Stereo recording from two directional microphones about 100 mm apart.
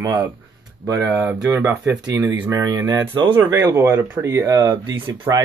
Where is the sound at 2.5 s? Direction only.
35° right (ahead or behind).